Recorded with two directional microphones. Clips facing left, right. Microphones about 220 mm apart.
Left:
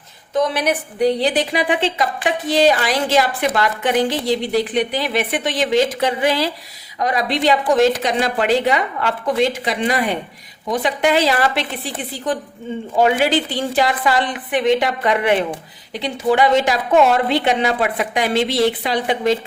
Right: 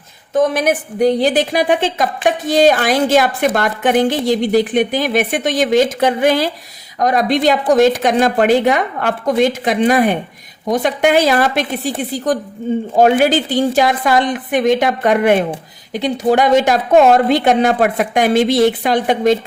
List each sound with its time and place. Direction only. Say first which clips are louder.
0.3 s a woman's voice: right 4 dB; 45° right (ahead or behind)